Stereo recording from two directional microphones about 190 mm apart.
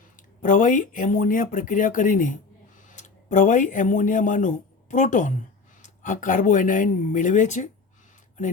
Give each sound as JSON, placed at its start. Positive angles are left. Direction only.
{"t": 0.4, "sound": "speech", "side_deg": 45}